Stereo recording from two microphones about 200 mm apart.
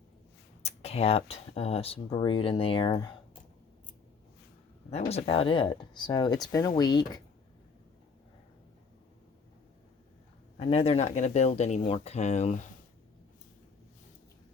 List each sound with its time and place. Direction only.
0.6 s speech: 30° left (ahead or behind)
4.9 s speech: 30° left (ahead or behind)
10.6 s speech: 30° left (ahead or behind)